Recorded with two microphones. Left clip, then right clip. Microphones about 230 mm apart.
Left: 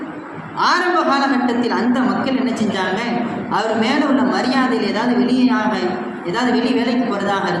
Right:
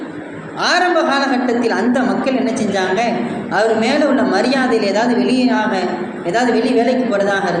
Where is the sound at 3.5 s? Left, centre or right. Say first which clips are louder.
Right 4 dB; left.